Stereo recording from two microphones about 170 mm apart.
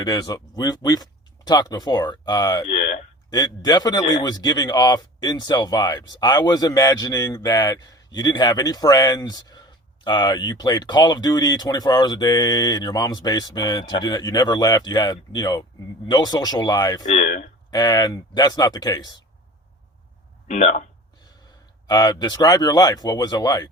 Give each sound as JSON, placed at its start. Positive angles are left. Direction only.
{"t": 0.0, "sound": "speech", "side_deg": 25}
{"t": 2.6, "sound": "a sound", "side_deg": 45}
{"t": 3.3, "sound": "a man's voice", "side_deg": 25}
{"t": 17.1, "sound": "speech", "side_deg": 50}
{"t": 17.7, "sound": "a man's voice", "side_deg": 25}
{"t": 20.5, "sound": "speech", "side_deg": 45}
{"t": 21.8, "sound": "a man's voice", "side_deg": 25}